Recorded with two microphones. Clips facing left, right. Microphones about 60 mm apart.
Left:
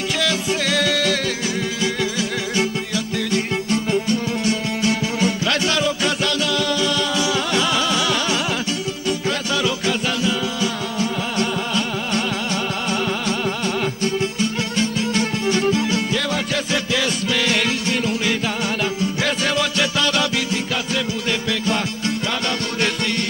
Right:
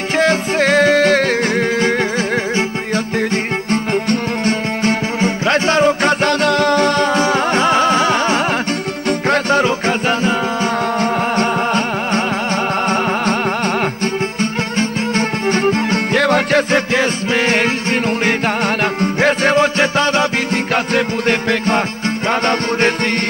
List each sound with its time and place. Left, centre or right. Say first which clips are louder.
0.2 s music: right 9 dB; right
18.9 s music: right 7 dB; right
20.7 s music: right 7 dB; right